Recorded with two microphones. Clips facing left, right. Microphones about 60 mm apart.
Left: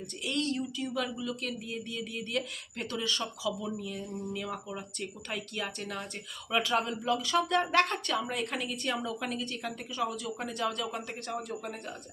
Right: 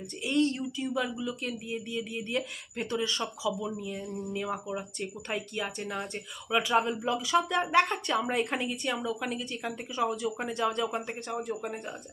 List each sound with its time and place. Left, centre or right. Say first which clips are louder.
0.3 s speech: right 5 dB; right
8.3 s speech: right 4 dB; right
8.6 s speech: right 2 dB; centre